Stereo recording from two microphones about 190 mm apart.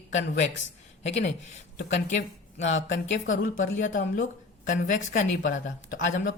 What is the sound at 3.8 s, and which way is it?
Speech, 45° left (ahead or behind).